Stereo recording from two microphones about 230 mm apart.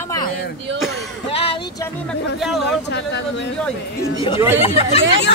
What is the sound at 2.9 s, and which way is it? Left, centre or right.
Speech, left.